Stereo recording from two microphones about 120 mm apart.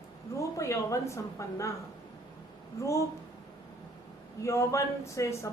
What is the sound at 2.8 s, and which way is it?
Speech, 25° left (ahead or behind).